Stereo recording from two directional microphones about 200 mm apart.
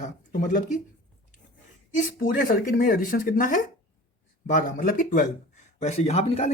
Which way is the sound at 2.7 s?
45° left (ahead or behind).